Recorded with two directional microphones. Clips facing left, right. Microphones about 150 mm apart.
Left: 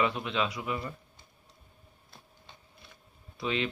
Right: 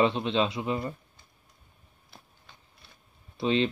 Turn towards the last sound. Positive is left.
turn(degrees=-30)  # may be behind; listen again after turning